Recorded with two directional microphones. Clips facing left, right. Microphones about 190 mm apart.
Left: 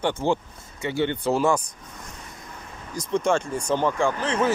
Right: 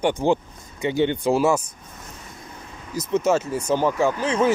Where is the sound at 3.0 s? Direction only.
5° right (ahead or behind).